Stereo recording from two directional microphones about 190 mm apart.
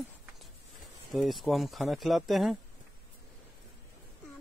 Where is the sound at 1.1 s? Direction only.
Centre (ahead or behind).